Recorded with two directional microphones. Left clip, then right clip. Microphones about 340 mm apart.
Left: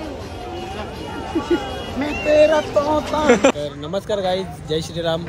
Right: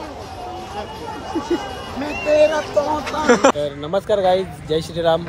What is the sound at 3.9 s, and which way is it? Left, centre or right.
Speech, centre.